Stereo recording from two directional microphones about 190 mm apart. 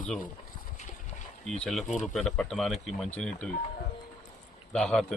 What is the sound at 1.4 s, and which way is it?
Speech, 5° left (ahead or behind).